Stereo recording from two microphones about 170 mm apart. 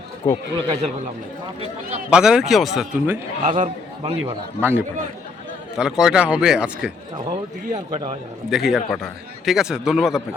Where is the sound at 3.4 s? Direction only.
45° right (ahead or behind).